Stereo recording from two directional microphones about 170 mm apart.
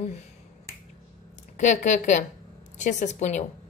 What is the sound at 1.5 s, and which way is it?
A woman's voice, 45° left (ahead or behind).